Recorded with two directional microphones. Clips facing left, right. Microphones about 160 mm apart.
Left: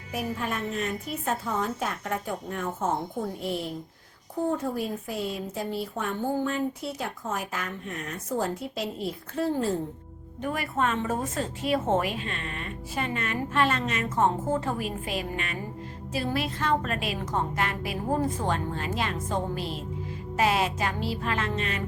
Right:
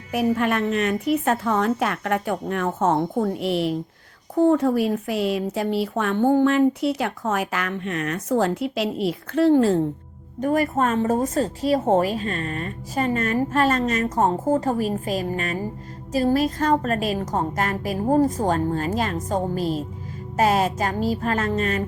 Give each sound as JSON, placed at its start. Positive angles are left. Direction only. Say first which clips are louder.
{"t": 0.1, "sound": "a woman's voice", "louder": "right 10 dB", "side_deg": -70}
{"t": 10.4, "sound": "speech", "louder": "right 7 dB", "side_deg": -40}
{"t": 20.3, "sound": "music", "louder": "right 5 dB", "side_deg": -45}